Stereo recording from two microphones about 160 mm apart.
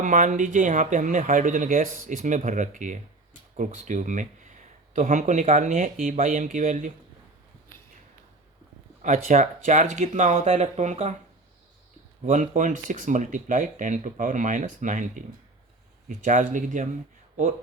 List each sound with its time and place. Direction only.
0.0 s speech: 55° right (ahead or behind)
9.0 s speech: 55° right (ahead or behind)
12.2 s speech: 50° right (ahead or behind)